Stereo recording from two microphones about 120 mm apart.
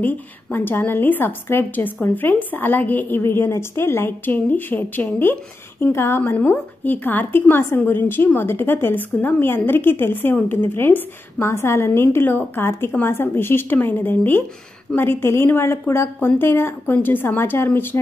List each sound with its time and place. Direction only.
0.0 s a woman's voice: 15° left (ahead or behind)